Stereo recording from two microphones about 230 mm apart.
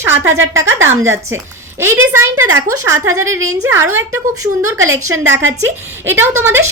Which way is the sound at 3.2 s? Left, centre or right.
Right.